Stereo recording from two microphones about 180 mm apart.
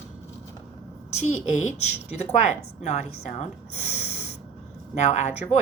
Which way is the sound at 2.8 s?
40° left (ahead or behind).